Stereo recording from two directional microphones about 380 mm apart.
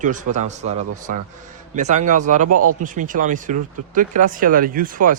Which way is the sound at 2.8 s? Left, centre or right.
Right.